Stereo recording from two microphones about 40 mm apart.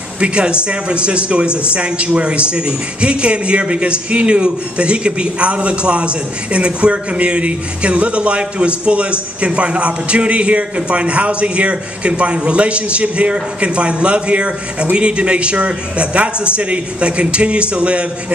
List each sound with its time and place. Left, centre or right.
0.2 s speech: right